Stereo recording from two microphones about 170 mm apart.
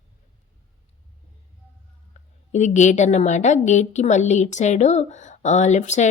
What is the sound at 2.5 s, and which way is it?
A woman's voice, 45° left (ahead or behind).